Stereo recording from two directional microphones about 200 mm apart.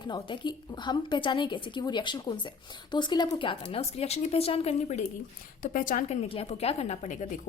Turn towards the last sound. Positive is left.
turn(degrees=35)  # may be behind; listen again after turning